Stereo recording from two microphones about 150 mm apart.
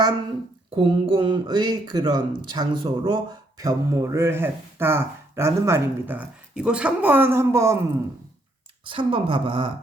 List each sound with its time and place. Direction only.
0.8 s speech: 35° right (ahead or behind)
3.6 s speech: 20° right (ahead or behind)
8.8 s speech: 35° right (ahead or behind)